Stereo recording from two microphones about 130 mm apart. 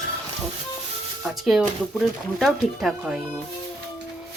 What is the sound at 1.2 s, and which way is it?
Speech, centre (ahead or behind).